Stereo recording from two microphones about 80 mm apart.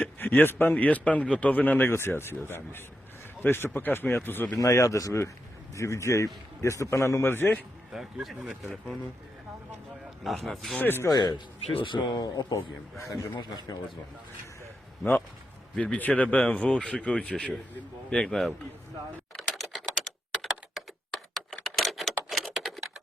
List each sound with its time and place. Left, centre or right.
0.0 s a man's voice: left
4.6 s a man's voice: left
7.9 s speech: centre
10.2 s speech: centre
10.8 s a man's voice: left
11.1 s speech: left
11.8 s speech: left
12.1 s speech: left
15.7 s speech: centre
16.0 s speech: left; by 18.5 s centre
19.4 s typing: centre
21.3 s a sound: centre